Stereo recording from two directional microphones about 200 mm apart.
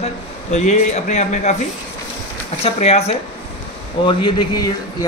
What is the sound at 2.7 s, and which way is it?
A man's voice, 30° left (ahead or behind).